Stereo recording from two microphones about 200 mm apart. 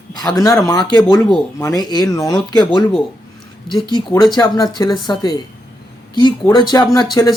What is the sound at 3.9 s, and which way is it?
Speech, 20° left (ahead or behind).